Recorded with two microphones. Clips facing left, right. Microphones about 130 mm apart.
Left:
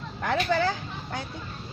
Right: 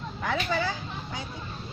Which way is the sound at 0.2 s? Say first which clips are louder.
Left 4 dB; 55° left (ahead or behind).